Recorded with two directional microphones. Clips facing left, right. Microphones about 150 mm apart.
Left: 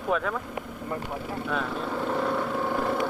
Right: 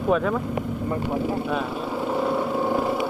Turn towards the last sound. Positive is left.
turn(degrees=-10)  # may be behind; listen again after turning